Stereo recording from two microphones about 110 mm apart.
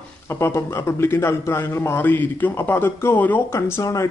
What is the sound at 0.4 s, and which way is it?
A man's voice, 25° left (ahead or behind).